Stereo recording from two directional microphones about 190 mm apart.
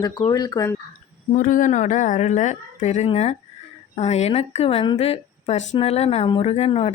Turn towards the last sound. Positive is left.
turn(degrees=35)  # may be behind; listen again after turning